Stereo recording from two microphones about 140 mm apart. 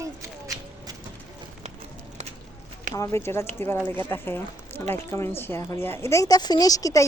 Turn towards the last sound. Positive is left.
turn(degrees=25)  # may be behind; listen again after turning